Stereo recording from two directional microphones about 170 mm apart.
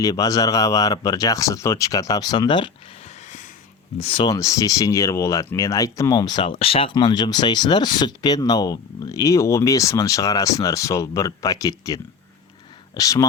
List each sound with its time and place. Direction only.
0.0 s speech: 20° left (ahead or behind)
3.9 s speech: 35° left (ahead or behind)